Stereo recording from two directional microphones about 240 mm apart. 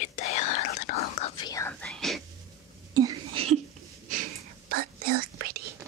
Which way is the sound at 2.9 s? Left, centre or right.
Centre.